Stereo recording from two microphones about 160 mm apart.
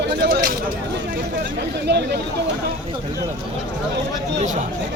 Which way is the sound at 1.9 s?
90° right.